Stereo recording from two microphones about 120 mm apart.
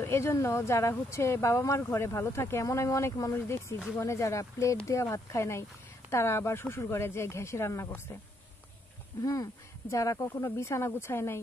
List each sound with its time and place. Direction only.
0.0 s speech: 20° left (ahead or behind)
9.2 s speech: 25° left (ahead or behind)